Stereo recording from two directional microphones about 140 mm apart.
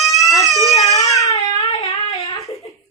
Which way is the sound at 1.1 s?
25° left (ahead or behind).